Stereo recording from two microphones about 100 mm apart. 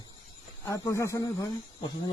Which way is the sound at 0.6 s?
30° left (ahead or behind).